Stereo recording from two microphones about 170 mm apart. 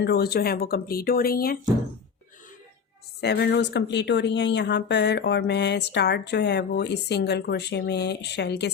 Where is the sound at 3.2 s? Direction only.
75° left (ahead or behind).